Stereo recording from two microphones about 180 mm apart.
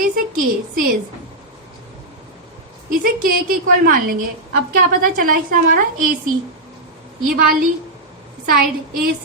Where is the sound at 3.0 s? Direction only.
55° right (ahead or behind).